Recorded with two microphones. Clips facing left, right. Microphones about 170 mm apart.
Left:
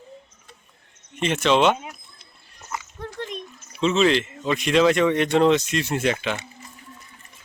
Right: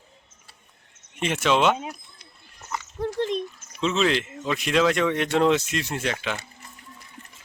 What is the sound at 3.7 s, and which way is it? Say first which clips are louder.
Speech: left 4 dB; centre (ahead or behind).